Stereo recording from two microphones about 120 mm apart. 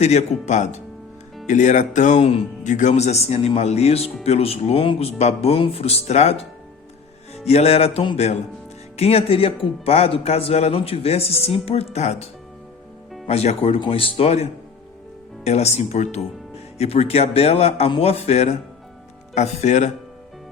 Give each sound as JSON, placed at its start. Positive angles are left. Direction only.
{"t": 0.0, "sound": "speech", "side_deg": 65}
{"t": 19.3, "sound": "speech", "side_deg": 75}